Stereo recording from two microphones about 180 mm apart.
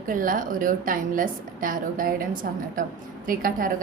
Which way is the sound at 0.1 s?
50° right (ahead or behind).